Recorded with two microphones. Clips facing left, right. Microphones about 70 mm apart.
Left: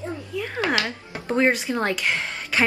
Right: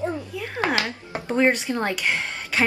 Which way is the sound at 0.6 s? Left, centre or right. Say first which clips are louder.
Right 1 dB; right.